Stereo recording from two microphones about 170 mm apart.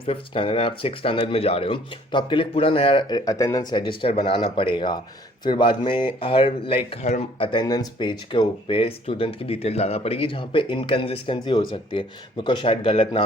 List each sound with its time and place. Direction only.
0.0 s speech: 30° left (ahead or behind)